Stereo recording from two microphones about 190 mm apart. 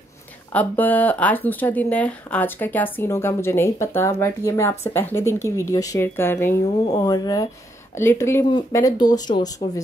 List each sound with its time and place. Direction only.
0.5 s speech: 10° left (ahead or behind)